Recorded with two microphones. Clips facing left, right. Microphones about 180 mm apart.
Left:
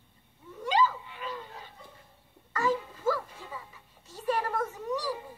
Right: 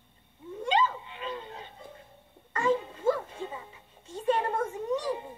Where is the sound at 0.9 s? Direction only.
25° right (ahead or behind).